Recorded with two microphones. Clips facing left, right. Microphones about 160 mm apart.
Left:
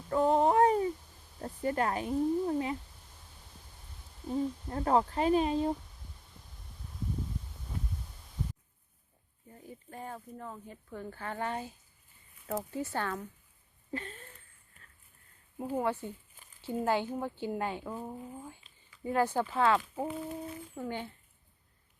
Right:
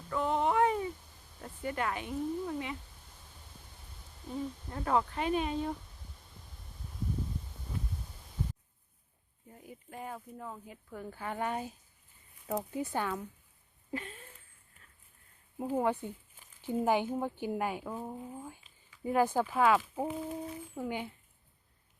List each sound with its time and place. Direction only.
0.1 s a sound: 35° left (ahead or behind)
1.4 s speech: 35° left (ahead or behind)
4.7 s speech: 30° left (ahead or behind)
9.5 s speech: 10° right (ahead or behind)
13.9 s a sound: 10° right (ahead or behind)
15.6 s speech: 15° right (ahead or behind)